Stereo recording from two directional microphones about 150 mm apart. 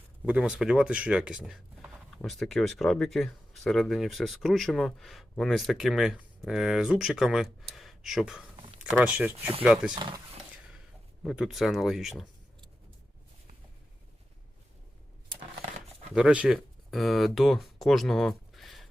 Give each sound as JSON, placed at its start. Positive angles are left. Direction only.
{"t": 0.3, "sound": "speech", "side_deg": -5}
{"t": 9.9, "sound": "speech", "side_deg": -30}
{"t": 11.2, "sound": "speech", "side_deg": 0}
{"t": 16.1, "sound": "speech", "side_deg": -5}